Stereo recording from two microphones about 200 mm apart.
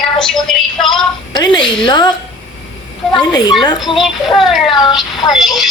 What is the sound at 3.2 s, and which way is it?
Speech, 20° left (ahead or behind).